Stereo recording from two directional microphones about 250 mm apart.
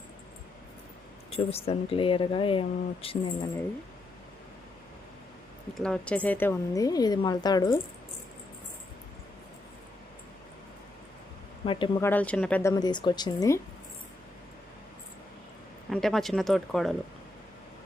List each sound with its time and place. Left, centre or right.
1.3 s speech: left
5.7 s speech: centre
11.6 s speech: centre
15.9 s speech: centre